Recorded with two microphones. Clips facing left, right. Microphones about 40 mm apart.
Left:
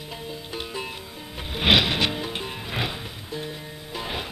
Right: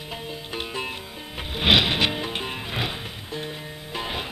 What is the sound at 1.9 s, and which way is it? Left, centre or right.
Music, centre.